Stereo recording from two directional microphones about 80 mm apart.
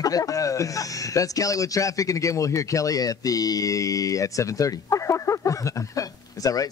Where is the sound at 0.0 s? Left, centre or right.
Left.